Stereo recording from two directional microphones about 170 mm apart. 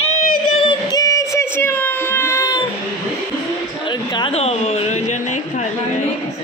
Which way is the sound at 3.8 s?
25° left (ahead or behind).